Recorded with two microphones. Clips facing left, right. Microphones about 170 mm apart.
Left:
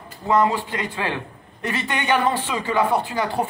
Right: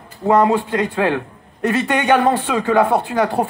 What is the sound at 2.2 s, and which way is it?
Speech, 50° right (ahead or behind).